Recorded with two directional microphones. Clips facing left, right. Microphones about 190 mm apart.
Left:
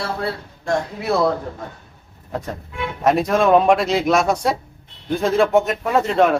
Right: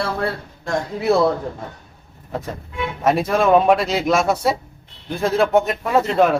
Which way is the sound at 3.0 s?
Centre (ahead or behind).